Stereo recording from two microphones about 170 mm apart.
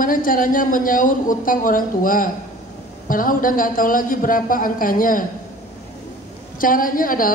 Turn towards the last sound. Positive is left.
turn(degrees=55)  # may be behind; listen again after turning